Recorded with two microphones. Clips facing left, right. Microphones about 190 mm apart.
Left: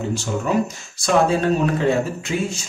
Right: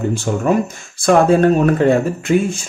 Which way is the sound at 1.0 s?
55° right (ahead or behind).